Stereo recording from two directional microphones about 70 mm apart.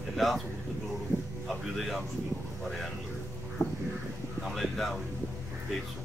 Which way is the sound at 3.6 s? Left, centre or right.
Left.